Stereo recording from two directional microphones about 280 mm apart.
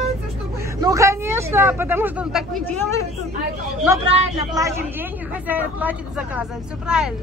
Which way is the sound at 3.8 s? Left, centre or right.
Right.